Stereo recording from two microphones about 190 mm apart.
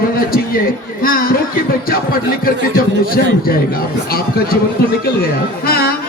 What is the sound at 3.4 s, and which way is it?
Speech, 50° left (ahead or behind).